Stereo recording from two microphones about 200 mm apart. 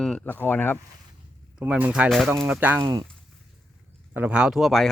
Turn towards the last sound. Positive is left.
turn(degrees=0)  # may be behind; listen again after turning